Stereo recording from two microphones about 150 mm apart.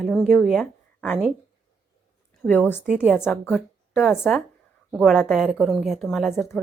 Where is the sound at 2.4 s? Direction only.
10° left (ahead or behind).